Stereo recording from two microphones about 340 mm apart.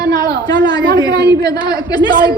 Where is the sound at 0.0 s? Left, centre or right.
Right.